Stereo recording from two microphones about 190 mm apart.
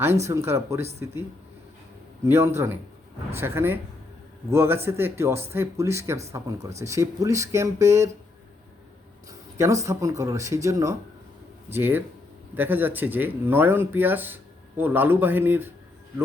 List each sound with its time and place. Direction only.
0.3 s speech: 15° right (ahead or behind)
2.2 s speech: 15° right (ahead or behind)
9.6 s speech: 15° right (ahead or behind)